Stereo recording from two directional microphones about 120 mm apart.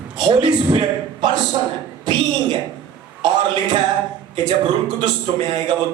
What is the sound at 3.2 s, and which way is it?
Speech, 40° right (ahead or behind).